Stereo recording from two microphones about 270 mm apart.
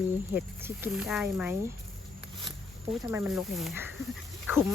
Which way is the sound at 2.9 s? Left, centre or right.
Centre.